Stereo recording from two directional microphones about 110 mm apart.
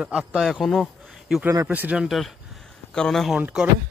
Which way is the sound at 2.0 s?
Centre (ahead or behind).